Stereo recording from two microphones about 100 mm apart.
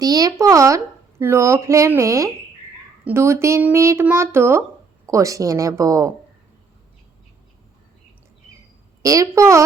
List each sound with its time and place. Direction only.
0.0 s speech: 40° right (ahead or behind)
9.0 s speech: 35° right (ahead or behind)